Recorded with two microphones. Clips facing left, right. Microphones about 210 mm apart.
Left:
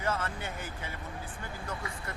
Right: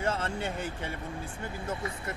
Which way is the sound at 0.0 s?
30° right (ahead or behind).